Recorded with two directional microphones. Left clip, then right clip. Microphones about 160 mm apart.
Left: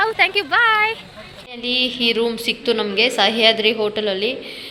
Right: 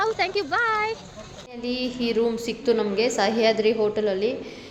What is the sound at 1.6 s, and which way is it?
A woman's voice, 10° right (ahead or behind).